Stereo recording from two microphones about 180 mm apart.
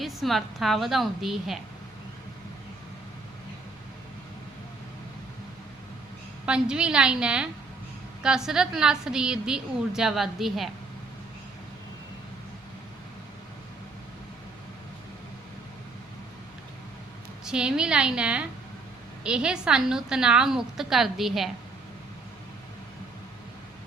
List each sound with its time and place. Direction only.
0.0 s a woman's voice: centre (ahead or behind)
6.4 s a woman's voice: 5° right (ahead or behind)
17.4 s a woman's voice: 5° right (ahead or behind)